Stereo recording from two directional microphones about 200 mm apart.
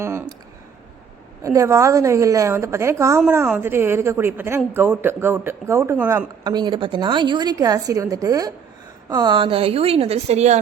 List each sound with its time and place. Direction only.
0.0 s speech: 15° right (ahead or behind)
1.5 s a woman's voice: 15° right (ahead or behind); by 10.6 s 35° right (ahead or behind)